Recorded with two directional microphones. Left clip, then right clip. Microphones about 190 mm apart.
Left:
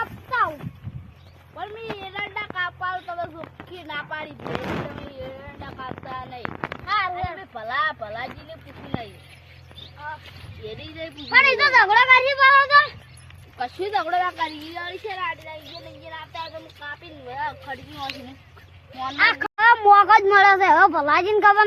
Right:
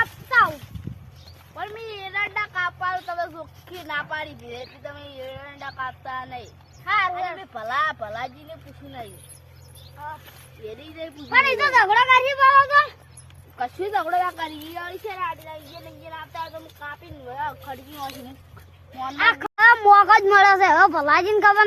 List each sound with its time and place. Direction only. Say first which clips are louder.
0.3 s clip-clop: right 4 dB; 10° right (ahead or behind)
1.5 s a sound: even; centre (ahead or behind)
3.7 s speech: right 3 dB; centre (ahead or behind)
5.8 s speech: right 2 dB; centre (ahead or behind)
11.3 s speech: left 2 dB; 30° right (ahead or behind)
12.3 s speech: left 1 dB; 10° right (ahead or behind)
13.6 s speech: even; centre (ahead or behind)
16.9 s speech: left 4 dB; 10° left (ahead or behind)
19.1 s speech: even; 15° right (ahead or behind)